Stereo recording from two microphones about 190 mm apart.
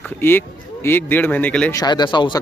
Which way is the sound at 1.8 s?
20° left (ahead or behind).